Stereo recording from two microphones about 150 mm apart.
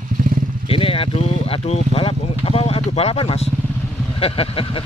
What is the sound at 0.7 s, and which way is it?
Speech, 40° left (ahead or behind).